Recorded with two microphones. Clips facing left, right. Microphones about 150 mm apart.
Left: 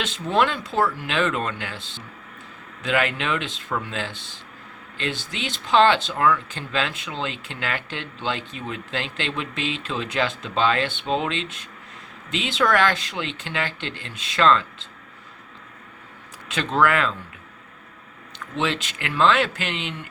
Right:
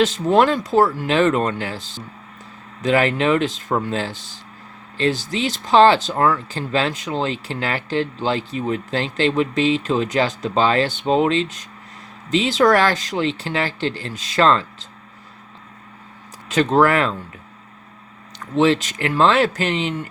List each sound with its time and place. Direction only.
0.0 s speech: 40° right (ahead or behind)
16.5 s speech: 40° right (ahead or behind)
18.3 s speech: 40° right (ahead or behind)